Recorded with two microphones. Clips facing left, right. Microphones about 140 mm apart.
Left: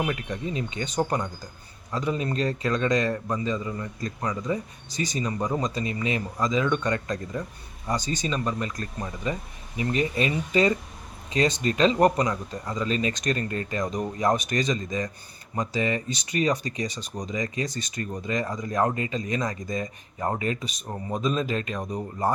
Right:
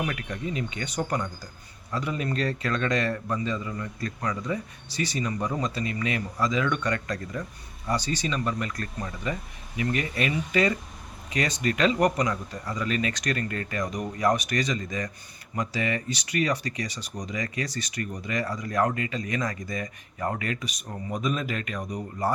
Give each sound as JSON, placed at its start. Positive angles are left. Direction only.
{"t": 0.0, "sound": "speech", "side_deg": 25}